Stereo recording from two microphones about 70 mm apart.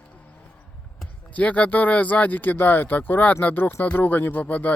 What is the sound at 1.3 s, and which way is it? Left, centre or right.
Speech, left.